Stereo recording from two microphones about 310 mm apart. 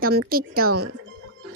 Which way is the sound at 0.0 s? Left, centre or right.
Right.